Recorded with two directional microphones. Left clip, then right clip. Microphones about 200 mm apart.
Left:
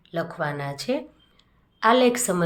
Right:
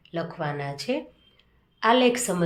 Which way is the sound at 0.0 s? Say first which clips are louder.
Left 3 dB; 15° left (ahead or behind).